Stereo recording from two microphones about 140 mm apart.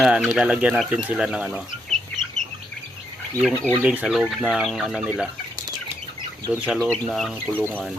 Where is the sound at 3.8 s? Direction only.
5° right (ahead or behind).